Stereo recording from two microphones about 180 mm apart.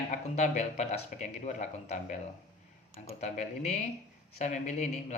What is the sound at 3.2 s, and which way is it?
A man's voice, 40° left (ahead or behind).